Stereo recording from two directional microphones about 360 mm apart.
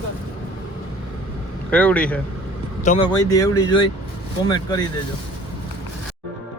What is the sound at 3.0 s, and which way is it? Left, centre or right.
Speech, centre.